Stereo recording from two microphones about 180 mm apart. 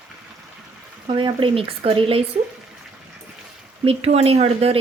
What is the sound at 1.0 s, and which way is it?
Speech, 30° right (ahead or behind).